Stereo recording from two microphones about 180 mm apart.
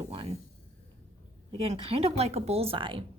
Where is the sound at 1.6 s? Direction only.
30° right (ahead or behind).